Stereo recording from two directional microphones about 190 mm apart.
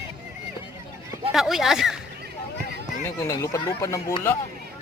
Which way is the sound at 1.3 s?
Centre (ahead or behind).